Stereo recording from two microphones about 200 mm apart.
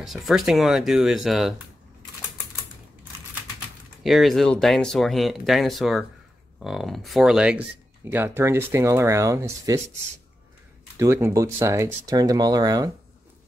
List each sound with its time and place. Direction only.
0.0 s speech: centre (ahead or behind)
4.0 s speech: centre (ahead or behind); by 9.8 s 15° right (ahead or behind)
11.0 s speech: 15° right (ahead or behind)